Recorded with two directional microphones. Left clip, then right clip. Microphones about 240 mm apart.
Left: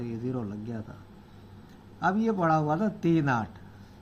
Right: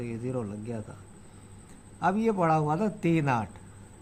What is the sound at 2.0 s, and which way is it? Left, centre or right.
A man's voice, centre.